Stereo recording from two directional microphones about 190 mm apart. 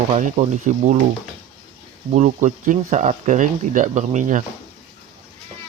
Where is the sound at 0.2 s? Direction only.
40° right (ahead or behind).